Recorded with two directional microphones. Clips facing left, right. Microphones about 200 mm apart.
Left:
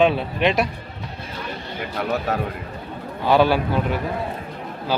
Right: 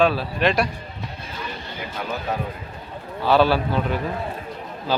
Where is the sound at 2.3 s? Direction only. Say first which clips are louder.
Right 1 dB; 75° left (ahead or behind).